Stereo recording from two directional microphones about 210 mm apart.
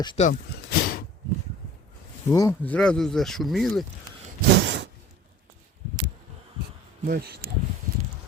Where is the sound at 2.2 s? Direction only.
15° left (ahead or behind).